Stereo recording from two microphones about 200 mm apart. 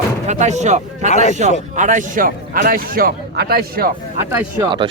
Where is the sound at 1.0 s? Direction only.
35° left (ahead or behind).